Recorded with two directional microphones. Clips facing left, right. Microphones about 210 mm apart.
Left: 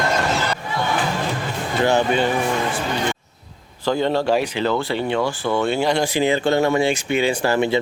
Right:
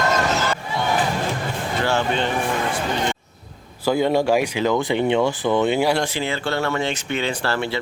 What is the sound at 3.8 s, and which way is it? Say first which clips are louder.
Speech: right 1 dB; 10° right (ahead or behind).